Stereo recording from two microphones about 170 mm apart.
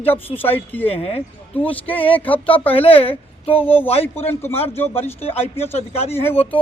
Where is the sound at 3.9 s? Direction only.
35° left (ahead or behind).